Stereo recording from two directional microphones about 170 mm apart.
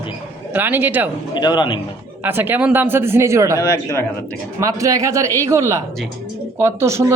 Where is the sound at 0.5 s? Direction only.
10° right (ahead or behind).